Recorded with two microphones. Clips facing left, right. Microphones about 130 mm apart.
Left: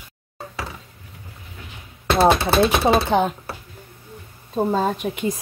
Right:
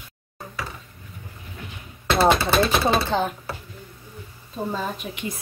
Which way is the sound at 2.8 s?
15° left (ahead or behind).